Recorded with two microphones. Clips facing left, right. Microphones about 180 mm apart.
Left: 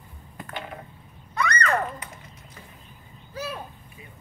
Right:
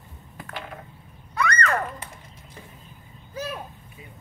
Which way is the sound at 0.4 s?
Centre (ahead or behind).